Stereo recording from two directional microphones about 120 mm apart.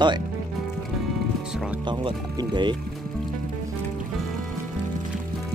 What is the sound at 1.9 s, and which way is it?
Speech, 40° right (ahead or behind).